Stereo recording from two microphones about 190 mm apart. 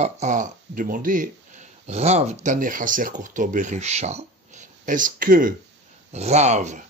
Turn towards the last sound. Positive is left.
turn(degrees=-35)  # may be behind; listen again after turning